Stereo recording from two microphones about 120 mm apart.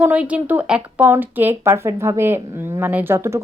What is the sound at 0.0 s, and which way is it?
A woman's voice, 10° right (ahead or behind).